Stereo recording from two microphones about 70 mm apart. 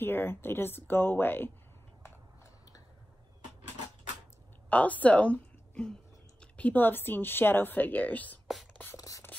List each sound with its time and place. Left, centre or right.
0.0 s speech: left
4.6 s a woman's voice: left
8.9 s a sound: left